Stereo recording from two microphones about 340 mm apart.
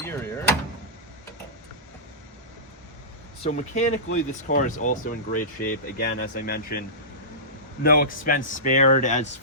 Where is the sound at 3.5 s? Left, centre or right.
Left.